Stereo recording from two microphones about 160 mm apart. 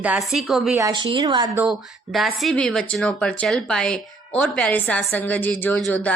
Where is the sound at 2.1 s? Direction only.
Centre (ahead or behind).